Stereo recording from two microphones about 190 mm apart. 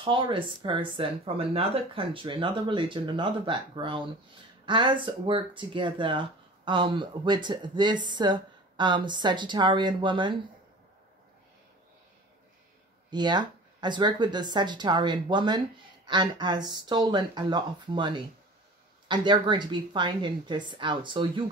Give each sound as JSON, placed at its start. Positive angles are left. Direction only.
{"t": 0.0, "sound": "speech", "side_deg": -25}
{"t": 13.1, "sound": "speech", "side_deg": -20}